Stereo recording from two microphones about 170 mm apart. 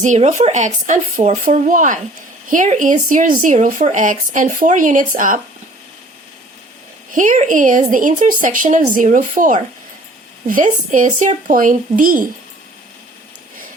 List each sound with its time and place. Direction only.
0.0 s speech: 45° right (ahead or behind)
7.1 s speech: 50° right (ahead or behind)